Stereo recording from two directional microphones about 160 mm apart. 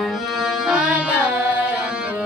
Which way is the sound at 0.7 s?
5° right (ahead or behind).